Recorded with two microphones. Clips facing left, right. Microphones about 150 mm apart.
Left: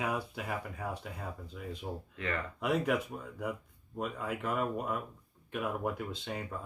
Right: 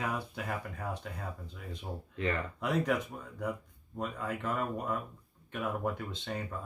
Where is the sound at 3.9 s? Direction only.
5° left (ahead or behind).